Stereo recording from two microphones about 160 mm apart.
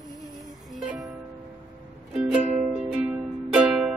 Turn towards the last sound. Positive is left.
turn(degrees=-5)  # may be behind; listen again after turning